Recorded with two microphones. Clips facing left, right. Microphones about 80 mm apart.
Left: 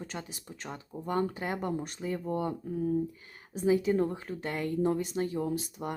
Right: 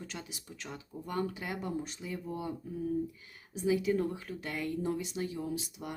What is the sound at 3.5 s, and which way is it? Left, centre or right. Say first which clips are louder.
Speech: left 3 dB; left.